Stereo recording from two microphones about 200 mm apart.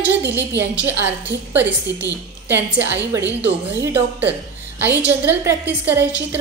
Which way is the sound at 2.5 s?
10° right (ahead or behind).